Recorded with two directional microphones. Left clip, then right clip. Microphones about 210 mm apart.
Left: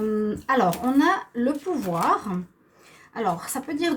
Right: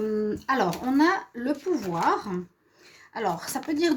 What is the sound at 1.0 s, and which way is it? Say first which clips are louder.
A woman's voice: left 2 dB; 45° right (ahead or behind).